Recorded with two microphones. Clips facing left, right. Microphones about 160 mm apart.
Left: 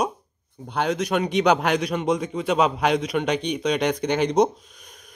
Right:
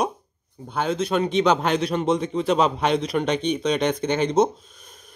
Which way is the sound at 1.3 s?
15° left (ahead or behind).